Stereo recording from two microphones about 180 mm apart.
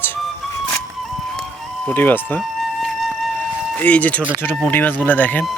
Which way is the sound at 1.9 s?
10° left (ahead or behind).